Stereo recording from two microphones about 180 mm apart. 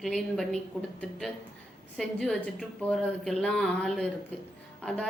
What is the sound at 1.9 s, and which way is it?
A woman's voice, centre (ahead or behind).